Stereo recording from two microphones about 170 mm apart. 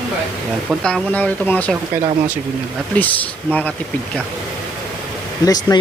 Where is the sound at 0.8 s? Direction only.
5° left (ahead or behind).